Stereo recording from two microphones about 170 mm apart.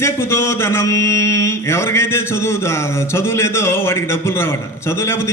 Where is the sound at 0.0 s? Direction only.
15° left (ahead or behind).